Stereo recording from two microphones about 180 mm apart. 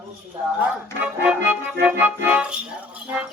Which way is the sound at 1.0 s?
10° right (ahead or behind).